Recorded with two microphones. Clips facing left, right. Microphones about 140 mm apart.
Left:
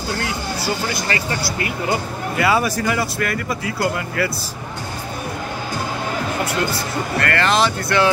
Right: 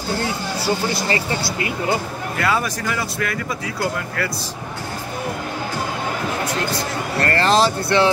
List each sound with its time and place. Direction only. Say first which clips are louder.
1.0 s speech: right 1 dB; 25° right (ahead or behind)
2.3 s speech: left 4 dB; 5° left (ahead or behind)
7.2 s speech: right 2 dB; 35° right (ahead or behind)